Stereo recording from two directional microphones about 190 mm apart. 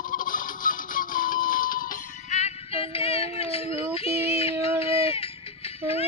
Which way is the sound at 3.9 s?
30° left (ahead or behind).